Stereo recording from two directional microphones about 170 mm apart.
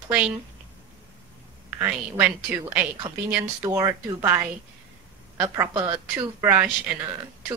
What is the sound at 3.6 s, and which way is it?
Speech, 20° right (ahead or behind).